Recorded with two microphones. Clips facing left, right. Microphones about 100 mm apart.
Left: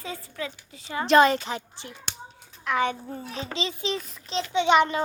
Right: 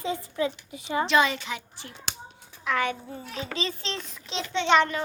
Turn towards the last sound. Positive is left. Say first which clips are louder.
# left 2 dB
turn(degrees=10)  # may be behind; listen again after turning